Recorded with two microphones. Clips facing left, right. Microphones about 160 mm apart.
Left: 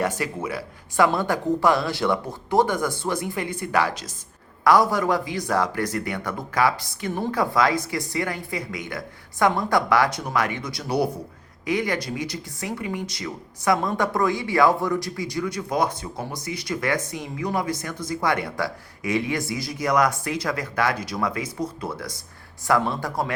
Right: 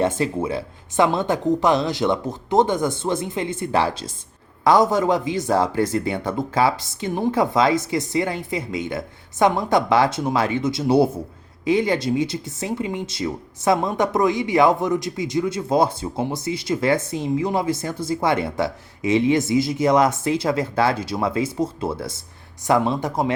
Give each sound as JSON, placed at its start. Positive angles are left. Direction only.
{"t": 0.0, "sound": "speech", "side_deg": -25}